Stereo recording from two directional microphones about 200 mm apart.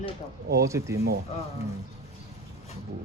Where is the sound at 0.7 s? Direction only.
15° right (ahead or behind).